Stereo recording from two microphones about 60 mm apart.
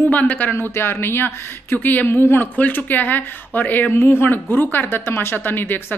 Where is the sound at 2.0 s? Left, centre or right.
Left.